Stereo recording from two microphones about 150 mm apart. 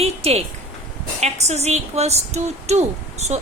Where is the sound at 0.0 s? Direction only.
40° right (ahead or behind).